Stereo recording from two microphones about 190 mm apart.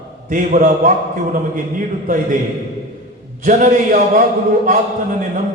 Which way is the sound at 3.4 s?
40° right (ahead or behind).